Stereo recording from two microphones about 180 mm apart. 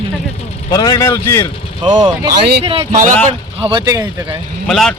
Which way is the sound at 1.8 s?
25° right (ahead or behind).